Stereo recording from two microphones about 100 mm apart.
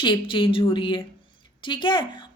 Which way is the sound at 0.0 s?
55° left (ahead or behind).